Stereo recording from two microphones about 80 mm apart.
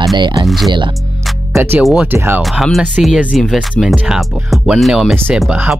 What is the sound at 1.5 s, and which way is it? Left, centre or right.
Speech, right.